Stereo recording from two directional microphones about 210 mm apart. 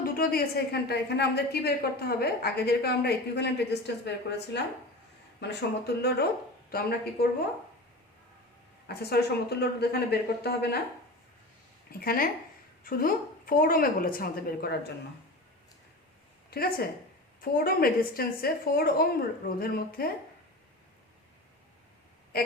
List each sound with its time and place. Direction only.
0.0 s a woman's voice: 45° left (ahead or behind)
8.9 s a woman's voice: 50° left (ahead or behind)
11.9 s a woman's voice: 45° left (ahead or behind)
16.5 s a woman's voice: 45° left (ahead or behind)
22.3 s a woman's voice: 45° left (ahead or behind)